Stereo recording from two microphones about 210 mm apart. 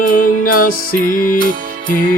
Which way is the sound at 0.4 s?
40° left (ahead or behind).